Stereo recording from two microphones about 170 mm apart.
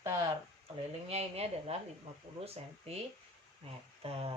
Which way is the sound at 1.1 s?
40° right (ahead or behind).